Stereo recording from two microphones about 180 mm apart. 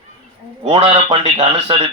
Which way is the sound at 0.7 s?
30° right (ahead or behind).